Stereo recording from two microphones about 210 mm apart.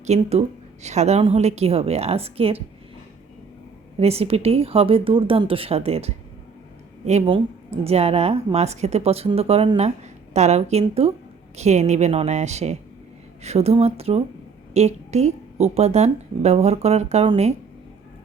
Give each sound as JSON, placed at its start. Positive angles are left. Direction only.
{"t": 0.0, "sound": "a woman's voice", "side_deg": -30}
{"t": 3.9, "sound": "a woman's voice", "side_deg": -30}